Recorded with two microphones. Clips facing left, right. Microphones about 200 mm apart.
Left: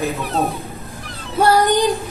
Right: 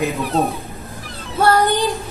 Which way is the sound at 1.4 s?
15° left (ahead or behind).